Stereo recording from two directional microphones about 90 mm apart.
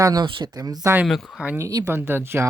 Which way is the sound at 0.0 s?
50° right (ahead or behind).